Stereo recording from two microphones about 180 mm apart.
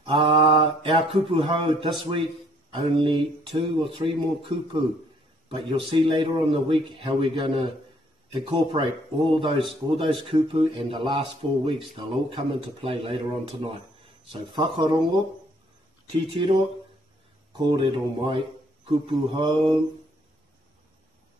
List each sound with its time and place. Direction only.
0.0 s speech: 30° right (ahead or behind)
5.5 s speech: 30° right (ahead or behind)
16.2 s speech: 30° right (ahead or behind)
17.5 s speech: 25° right (ahead or behind)